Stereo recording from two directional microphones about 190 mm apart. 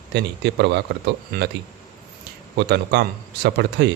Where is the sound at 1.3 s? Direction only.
50° right (ahead or behind).